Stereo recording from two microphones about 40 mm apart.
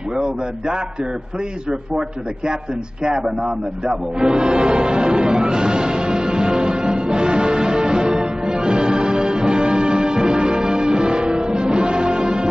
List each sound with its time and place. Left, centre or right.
0.1 s a man's voice: centre
3.0 s music: centre